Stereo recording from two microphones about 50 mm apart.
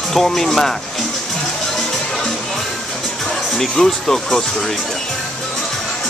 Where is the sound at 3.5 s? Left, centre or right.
Centre.